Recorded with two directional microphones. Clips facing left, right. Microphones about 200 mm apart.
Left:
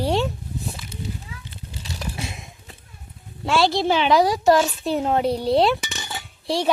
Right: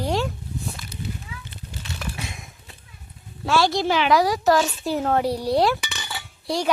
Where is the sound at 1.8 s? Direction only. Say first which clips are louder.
Left 2 dB; 35° left (ahead or behind).